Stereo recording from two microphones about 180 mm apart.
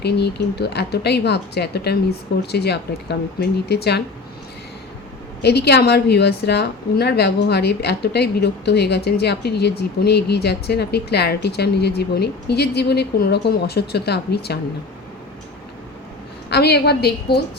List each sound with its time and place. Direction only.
0.0 s a woman's voice: 65° left (ahead or behind)
5.4 s a woman's voice: 65° left (ahead or behind)
16.5 s a woman's voice: 65° left (ahead or behind)